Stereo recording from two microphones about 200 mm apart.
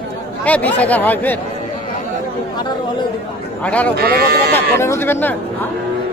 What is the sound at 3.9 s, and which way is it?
Speech, 50° right (ahead or behind).